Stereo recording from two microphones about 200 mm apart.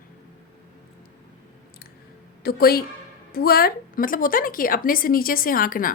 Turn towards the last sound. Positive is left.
turn(degrees=45)  # may be behind; listen again after turning